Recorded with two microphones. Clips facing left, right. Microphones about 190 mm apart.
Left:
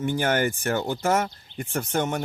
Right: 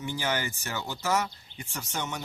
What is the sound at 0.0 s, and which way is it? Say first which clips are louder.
Speech: left 8 dB; 55° left (ahead or behind).